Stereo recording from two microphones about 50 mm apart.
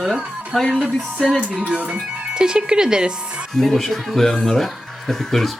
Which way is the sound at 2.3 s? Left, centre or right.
Centre.